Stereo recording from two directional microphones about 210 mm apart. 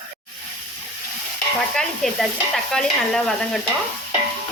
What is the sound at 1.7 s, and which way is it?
Sizzle, centre (ahead or behind).